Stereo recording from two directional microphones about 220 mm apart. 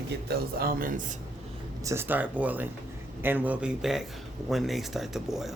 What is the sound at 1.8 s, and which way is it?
Speech, 10° right (ahead or behind).